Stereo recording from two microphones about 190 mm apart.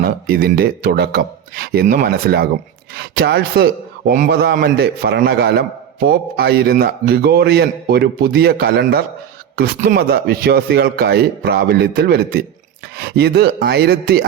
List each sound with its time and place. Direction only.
0.0 s a man's voice: 50° right (ahead or behind)